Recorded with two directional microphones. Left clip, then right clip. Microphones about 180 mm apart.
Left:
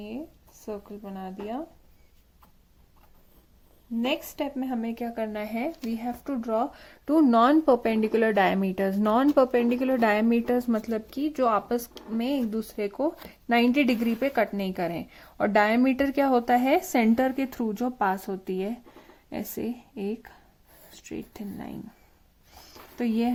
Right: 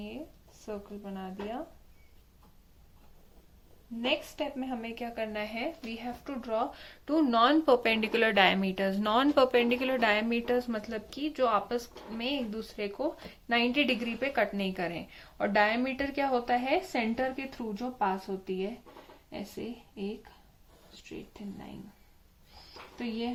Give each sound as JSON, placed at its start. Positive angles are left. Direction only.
{"t": 0.6, "sound": "speech", "side_deg": 40}
{"t": 4.0, "sound": "a woman's voice", "side_deg": 40}
{"t": 10.8, "sound": "a woman's voice", "side_deg": 50}